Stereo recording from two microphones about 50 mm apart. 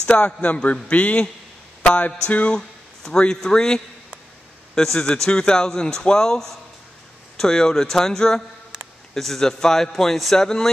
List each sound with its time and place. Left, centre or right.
0.0 s a man's voice: left
1.8 s mantra: left
2.2 s a man's voice: left